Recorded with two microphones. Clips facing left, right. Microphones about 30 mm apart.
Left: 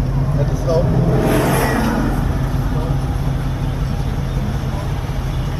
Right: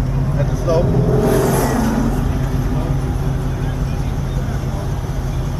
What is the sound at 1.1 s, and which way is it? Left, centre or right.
Vehicle, left.